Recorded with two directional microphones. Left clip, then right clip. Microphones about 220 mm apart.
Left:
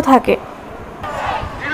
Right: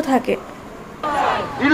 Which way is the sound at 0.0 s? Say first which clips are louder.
Left 7 dB; 10° left (ahead or behind).